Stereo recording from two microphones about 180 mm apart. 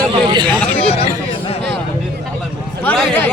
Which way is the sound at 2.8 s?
10° left (ahead or behind).